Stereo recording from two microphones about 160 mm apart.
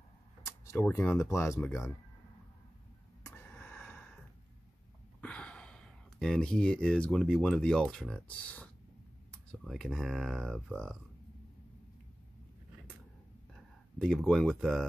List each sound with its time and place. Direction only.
0.5 s speech: 15° left (ahead or behind)
3.3 s gasp: 10° left (ahead or behind)
5.2 s speech: 5° left (ahead or behind)
13.9 s speech: 5° left (ahead or behind)